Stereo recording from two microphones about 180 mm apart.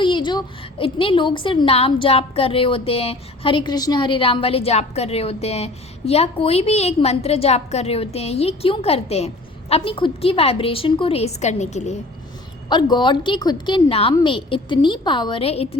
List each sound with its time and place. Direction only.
0.0 s a woman's voice: 25° left (ahead or behind)
12.6 s a woman's voice: 25° left (ahead or behind)